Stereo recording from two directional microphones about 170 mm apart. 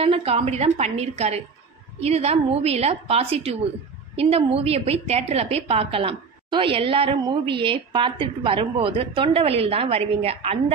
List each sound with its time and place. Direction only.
0.0 s a woman's voice: 35° right (ahead or behind)